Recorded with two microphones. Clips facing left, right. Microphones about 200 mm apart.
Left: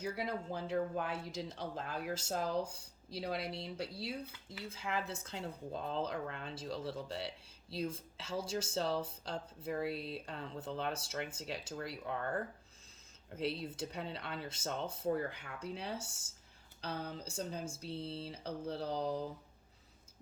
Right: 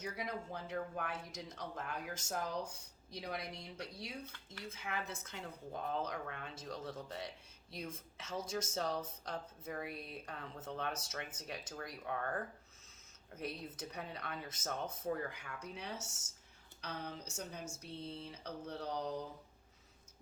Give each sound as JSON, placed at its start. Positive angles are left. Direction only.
{"t": 0.0, "sound": "speech", "side_deg": 30}